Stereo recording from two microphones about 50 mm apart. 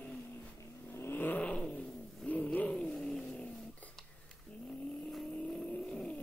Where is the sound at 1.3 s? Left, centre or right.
Left.